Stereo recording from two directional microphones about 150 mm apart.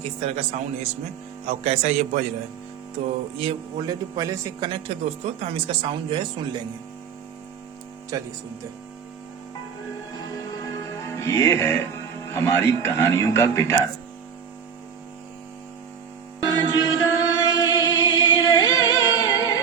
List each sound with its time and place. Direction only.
0.2 s a man's voice: 45° right (ahead or behind)
3.3 s speech: 40° right (ahead or behind)
3.8 s speech: 25° right (ahead or behind)
8.1 s speech: 25° right (ahead or behind)
10.2 s music: 25° left (ahead or behind)
12.3 s speech: 15° left (ahead or behind)
16.4 s chant: 25° left (ahead or behind)